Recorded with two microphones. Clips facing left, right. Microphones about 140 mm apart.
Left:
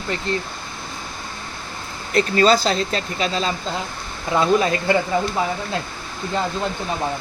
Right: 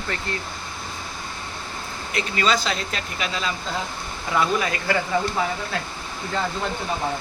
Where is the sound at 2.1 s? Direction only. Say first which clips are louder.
Left 7 dB; 35° left (ahead or behind).